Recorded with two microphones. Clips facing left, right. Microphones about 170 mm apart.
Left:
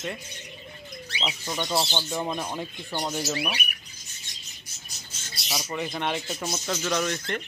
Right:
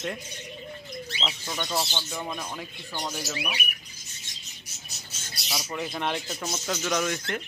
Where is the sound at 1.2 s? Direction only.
10° left (ahead or behind).